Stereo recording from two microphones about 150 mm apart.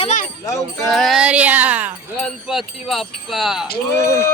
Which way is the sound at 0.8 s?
Centre (ahead or behind).